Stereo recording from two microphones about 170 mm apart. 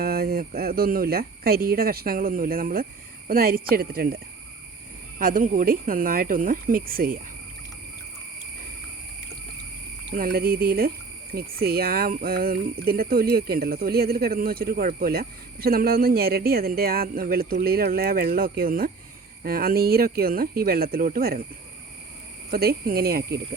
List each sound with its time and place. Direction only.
0.0 s speech: 65° right (ahead or behind)
5.2 s speech: 55° right (ahead or behind)
10.1 s speech: 60° right (ahead or behind)
22.5 s speech: 60° right (ahead or behind)